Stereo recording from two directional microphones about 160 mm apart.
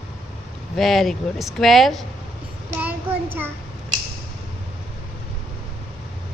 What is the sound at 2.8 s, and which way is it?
Child singing, 10° right (ahead or behind).